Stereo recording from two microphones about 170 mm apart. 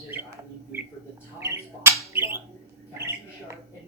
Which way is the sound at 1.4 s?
15° right (ahead or behind).